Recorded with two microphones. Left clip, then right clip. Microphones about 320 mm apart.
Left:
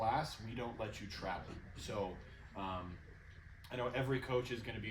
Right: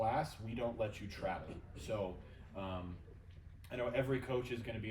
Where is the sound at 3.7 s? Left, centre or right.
Centre.